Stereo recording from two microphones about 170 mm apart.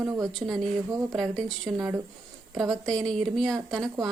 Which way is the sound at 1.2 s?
Centre (ahead or behind).